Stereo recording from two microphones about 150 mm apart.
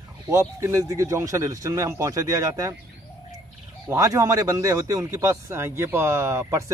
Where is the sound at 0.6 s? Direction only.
20° right (ahead or behind).